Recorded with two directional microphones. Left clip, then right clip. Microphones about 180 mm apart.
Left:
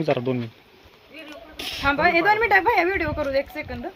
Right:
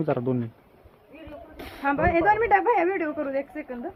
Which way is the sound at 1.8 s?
15° left (ahead or behind).